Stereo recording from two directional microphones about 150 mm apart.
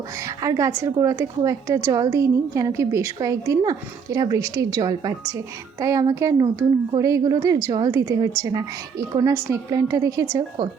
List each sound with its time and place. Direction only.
0.3 s a woman's voice: 20° right (ahead or behind)